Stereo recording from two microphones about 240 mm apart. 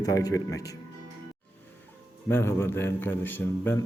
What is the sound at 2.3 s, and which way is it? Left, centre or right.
A man's voice, centre.